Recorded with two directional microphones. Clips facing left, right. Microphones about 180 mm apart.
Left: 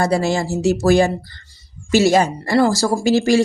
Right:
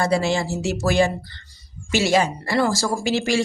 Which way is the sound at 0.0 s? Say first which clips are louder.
Left 3 dB; 40° left (ahead or behind).